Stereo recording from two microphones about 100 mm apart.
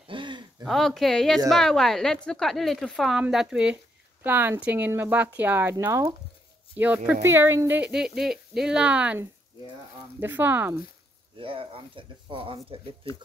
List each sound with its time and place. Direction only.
0.1 s a sound: 50° right (ahead or behind)
0.7 s a woman's voice: centre (ahead or behind)
4.2 s speech: 20° right (ahead or behind)
6.8 s speech: 15° right (ahead or behind)
7.9 s speech: 5° right (ahead or behind)
10.2 s speech: 20° right (ahead or behind)
11.3 s speech: 65° right (ahead or behind)